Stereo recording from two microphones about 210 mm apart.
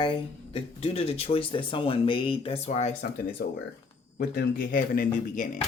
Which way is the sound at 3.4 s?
55° left (ahead or behind).